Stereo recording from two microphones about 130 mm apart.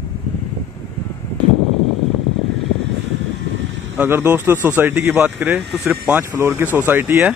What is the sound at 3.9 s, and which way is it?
Speech, 15° right (ahead or behind).